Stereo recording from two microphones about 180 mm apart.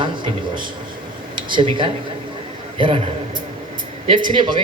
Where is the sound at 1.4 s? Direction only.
25° right (ahead or behind).